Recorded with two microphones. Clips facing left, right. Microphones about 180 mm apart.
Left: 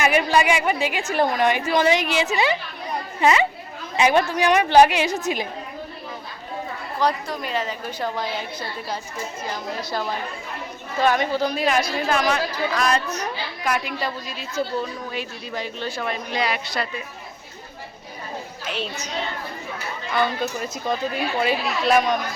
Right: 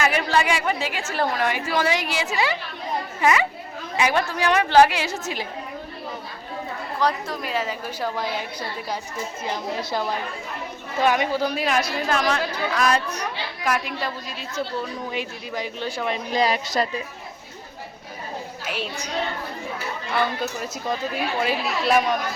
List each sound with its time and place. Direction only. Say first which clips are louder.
0.0 s a woman's voice: left 3 dB; 15° left (ahead or behind)
7.0 s speech: left 1 dB; centre (ahead or behind)
11.0 s speech: left 1 dB; 10° right (ahead or behind)
15.1 s speech: right 1 dB; 15° right (ahead or behind)
16.3 s a woman's voice: right 5 dB; 40° right (ahead or behind)
18.6 s speech: left 1 dB; 10° right (ahead or behind)
21.4 s speech: left 2 dB; centre (ahead or behind)